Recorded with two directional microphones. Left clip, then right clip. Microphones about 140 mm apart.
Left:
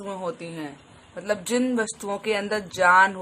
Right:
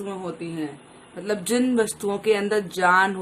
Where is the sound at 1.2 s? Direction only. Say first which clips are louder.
Right 1 dB; 25° left (ahead or behind).